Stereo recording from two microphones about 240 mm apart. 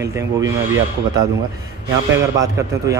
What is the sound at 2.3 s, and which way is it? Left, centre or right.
Speech, centre.